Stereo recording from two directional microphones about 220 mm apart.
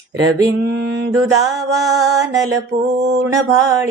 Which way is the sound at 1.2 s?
15° right (ahead or behind).